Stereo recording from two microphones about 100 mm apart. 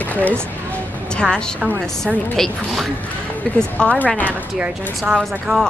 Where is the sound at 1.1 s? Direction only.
10° left (ahead or behind).